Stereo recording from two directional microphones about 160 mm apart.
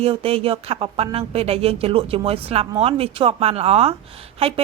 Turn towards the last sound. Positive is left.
turn(degrees=-40)  # may be behind; listen again after turning